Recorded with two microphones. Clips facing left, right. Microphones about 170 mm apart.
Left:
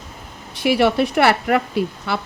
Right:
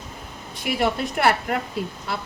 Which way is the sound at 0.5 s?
75° left (ahead or behind).